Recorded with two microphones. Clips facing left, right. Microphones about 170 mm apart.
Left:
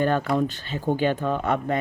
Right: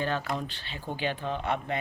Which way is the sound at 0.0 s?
50° left (ahead or behind).